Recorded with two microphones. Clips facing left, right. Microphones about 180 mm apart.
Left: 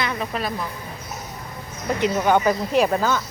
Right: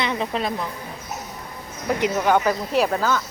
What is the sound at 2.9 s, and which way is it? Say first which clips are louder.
Speech: left 1 dB; 15° left (ahead or behind).